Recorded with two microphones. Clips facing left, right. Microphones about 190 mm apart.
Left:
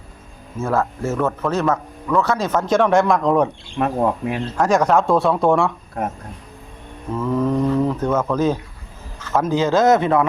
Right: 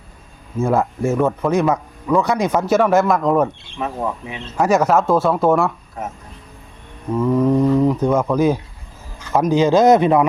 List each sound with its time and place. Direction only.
0.6 s speech: 15° right (ahead or behind)
3.8 s speech: 65° left (ahead or behind)
4.5 s speech: 5° right (ahead or behind)
6.0 s speech: 60° left (ahead or behind)
7.1 s speech: 15° right (ahead or behind)